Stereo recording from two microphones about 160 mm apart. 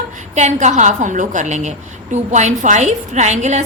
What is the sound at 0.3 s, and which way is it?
A woman's voice, 45° right (ahead or behind).